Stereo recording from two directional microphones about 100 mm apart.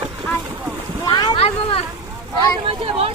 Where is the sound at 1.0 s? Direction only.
40° left (ahead or behind).